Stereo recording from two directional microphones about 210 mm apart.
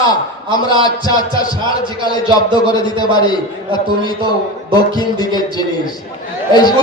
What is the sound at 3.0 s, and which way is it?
A man's voice, 20° left (ahead or behind).